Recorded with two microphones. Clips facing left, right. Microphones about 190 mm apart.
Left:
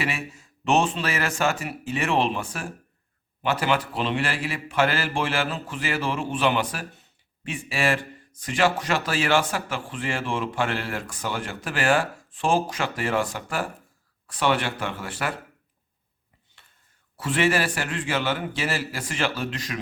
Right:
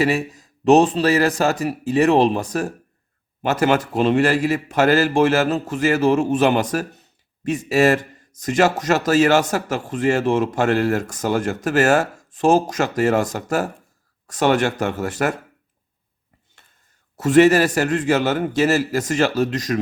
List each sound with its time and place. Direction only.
0.0 s a man's voice: 40° right (ahead or behind)
16.6 s whispering: 45° right (ahead or behind)
17.2 s speech: 40° right (ahead or behind)